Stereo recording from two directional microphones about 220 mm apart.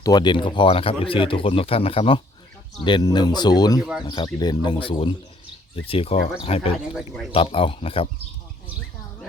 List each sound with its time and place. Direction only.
0.0 s speech: 20° left (ahead or behind)